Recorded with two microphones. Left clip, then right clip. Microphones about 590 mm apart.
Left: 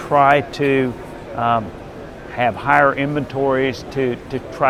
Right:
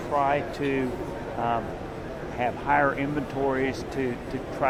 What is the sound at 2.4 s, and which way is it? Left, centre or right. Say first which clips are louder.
Speech: left 9 dB; left.